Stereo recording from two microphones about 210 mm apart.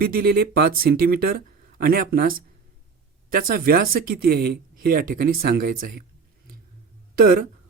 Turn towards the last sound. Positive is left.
turn(degrees=-50)  # may be behind; listen again after turning